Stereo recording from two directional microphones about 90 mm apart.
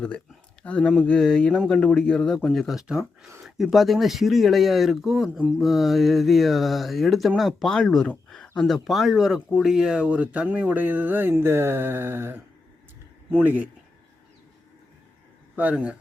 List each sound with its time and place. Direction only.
0.6 s speech: 15° left (ahead or behind)
3.0 s speech: 30° right (ahead or behind)
3.4 s speech: centre (ahead or behind); by 13.7 s 20° right (ahead or behind)
15.5 s speech: 15° right (ahead or behind)